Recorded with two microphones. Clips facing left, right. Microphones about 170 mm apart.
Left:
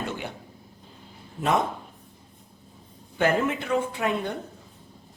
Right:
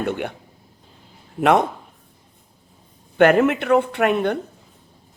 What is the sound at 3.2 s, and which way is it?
Speech, 70° right (ahead or behind).